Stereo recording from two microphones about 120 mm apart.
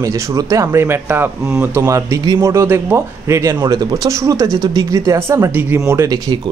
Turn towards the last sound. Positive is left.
turn(degrees=-35)  # may be behind; listen again after turning